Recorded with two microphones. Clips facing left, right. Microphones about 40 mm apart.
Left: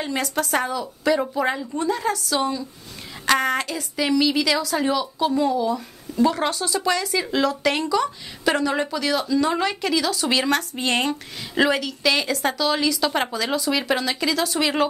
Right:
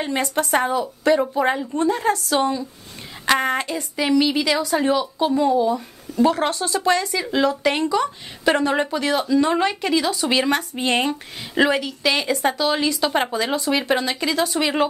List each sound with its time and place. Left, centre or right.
0.0 s speech: right
0.7 s speech: right
1.3 s speech: centre; by 2.4 s right
3.3 s speech: centre
6.2 s speech: right
8.6 s speech: right; by 14.9 s centre